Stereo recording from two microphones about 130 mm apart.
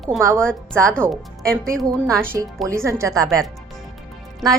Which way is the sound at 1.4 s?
5° left (ahead or behind).